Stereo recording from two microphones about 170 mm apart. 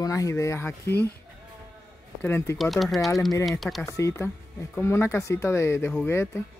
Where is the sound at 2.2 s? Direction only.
15° left (ahead or behind).